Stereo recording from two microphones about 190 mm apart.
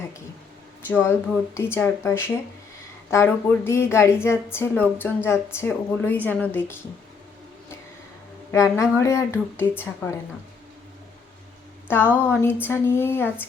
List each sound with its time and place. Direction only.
0.9 s a woman's voice: 10° left (ahead or behind)
8.5 s a woman's voice: 15° left (ahead or behind)
11.9 s a woman's voice: 10° left (ahead or behind)